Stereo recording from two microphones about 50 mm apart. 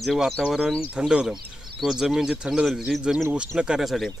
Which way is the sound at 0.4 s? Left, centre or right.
Centre.